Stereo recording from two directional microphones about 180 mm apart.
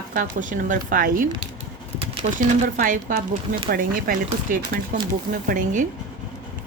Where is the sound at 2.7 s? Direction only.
50° right (ahead or behind).